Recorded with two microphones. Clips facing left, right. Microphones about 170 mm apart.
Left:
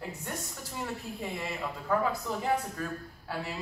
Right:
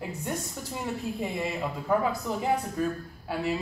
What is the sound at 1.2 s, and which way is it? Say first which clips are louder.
Speech: right 4 dB; 20° right (ahead or behind).